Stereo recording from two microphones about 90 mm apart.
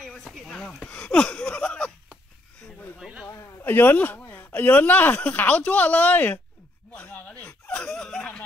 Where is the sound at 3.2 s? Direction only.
25° left (ahead or behind).